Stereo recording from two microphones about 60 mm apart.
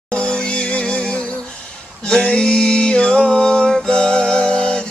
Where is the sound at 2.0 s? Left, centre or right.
Centre.